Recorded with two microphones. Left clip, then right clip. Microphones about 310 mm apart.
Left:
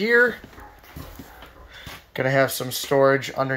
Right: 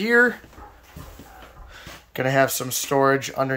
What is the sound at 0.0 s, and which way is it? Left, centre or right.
Speech, centre.